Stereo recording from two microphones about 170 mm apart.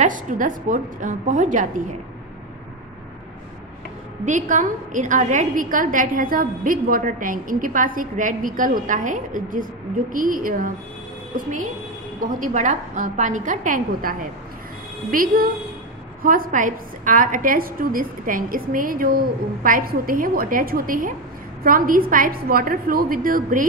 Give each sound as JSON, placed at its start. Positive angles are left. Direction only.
{"t": 0.0, "sound": "a woman's voice", "side_deg": -50}
{"t": 4.3, "sound": "a woman's voice", "side_deg": -50}
{"t": 12.2, "sound": "a woman's voice", "side_deg": -50}